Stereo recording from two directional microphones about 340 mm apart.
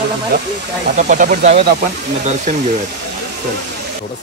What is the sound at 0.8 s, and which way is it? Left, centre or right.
Speech, right.